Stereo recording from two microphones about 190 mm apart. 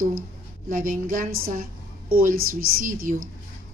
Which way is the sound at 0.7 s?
45° right (ahead or behind).